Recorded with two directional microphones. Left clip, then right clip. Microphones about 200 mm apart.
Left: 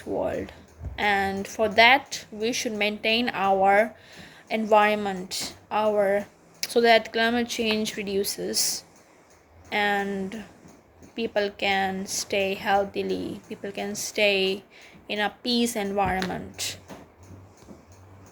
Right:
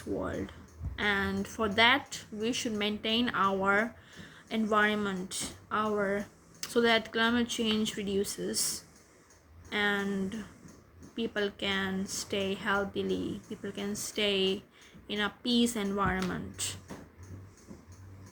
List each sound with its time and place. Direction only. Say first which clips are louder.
0.9 s a woman's voice: left 7 dB; 15° right (ahead or behind)